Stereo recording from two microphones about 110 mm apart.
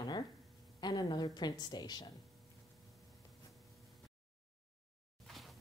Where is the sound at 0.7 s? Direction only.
40° left (ahead or behind).